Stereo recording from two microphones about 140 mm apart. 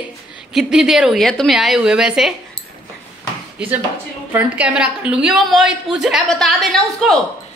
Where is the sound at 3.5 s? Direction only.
10° right (ahead or behind).